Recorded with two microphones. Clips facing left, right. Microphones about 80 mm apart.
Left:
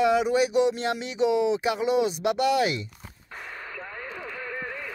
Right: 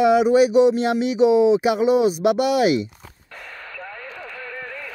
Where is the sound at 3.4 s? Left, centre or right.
Left.